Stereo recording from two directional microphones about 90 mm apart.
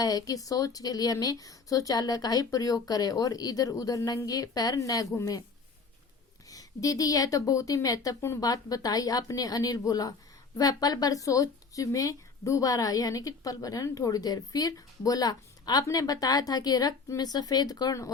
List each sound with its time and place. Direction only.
0.0 s speech: 45° left (ahead or behind)
6.5 s a woman's voice: 40° left (ahead or behind)